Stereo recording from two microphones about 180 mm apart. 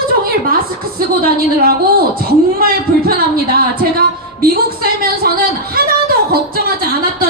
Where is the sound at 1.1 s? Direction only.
55° right (ahead or behind).